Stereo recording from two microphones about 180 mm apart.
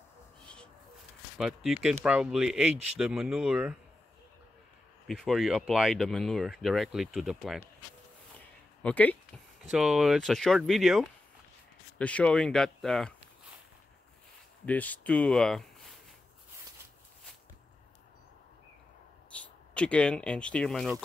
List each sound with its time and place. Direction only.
1.4 s speech: centre (ahead or behind)
5.0 s speech: 5° left (ahead or behind)
8.8 s speech: 10° left (ahead or behind)
9.6 s speech: centre (ahead or behind)
14.7 s speech: 10° left (ahead or behind)
19.3 s speech: 5° left (ahead or behind)